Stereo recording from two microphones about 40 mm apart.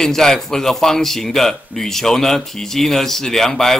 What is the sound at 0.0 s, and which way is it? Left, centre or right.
A man's voice, centre.